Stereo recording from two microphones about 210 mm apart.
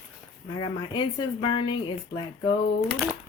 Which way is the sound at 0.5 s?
20° left (ahead or behind).